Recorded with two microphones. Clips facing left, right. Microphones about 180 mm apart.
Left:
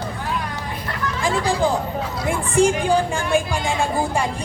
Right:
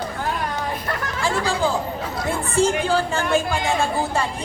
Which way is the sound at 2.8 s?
15° left (ahead or behind).